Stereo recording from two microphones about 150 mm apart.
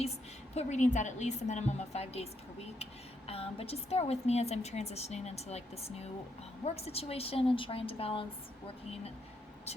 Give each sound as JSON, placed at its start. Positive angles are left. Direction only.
{"t": 0.5, "sound": "a woman's voice", "side_deg": 50}